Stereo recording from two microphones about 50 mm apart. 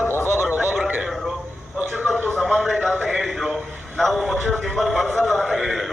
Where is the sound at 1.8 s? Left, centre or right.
Right.